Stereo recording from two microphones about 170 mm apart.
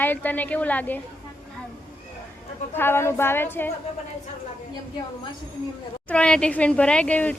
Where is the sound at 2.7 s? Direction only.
15° left (ahead or behind).